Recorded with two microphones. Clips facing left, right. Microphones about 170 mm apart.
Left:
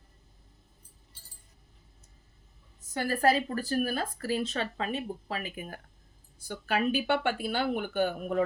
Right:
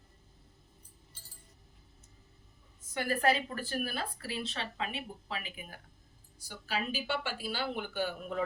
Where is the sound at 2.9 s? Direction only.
40° left (ahead or behind).